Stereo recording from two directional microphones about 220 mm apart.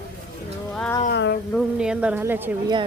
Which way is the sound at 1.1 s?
50° left (ahead or behind).